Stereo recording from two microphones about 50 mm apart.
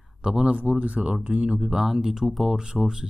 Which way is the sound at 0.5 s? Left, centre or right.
Right.